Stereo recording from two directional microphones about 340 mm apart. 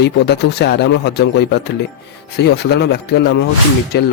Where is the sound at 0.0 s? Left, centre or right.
Left.